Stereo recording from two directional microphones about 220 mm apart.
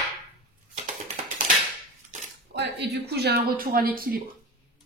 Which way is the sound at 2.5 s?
50° right (ahead or behind).